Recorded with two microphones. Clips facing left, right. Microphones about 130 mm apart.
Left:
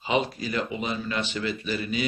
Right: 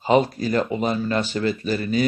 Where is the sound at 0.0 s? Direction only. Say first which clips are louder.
Right 7 dB; 40° right (ahead or behind).